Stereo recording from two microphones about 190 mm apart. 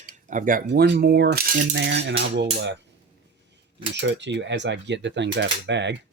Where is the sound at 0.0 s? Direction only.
45° right (ahead or behind).